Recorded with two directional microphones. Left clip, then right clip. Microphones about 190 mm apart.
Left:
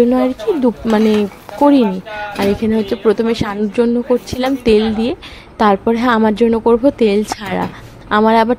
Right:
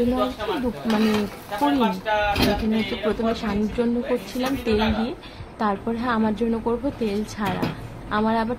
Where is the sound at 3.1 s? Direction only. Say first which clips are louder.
Left 11 dB; 35° left (ahead or behind).